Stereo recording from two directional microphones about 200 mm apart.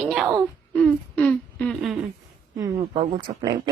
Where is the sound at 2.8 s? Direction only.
25° right (ahead or behind).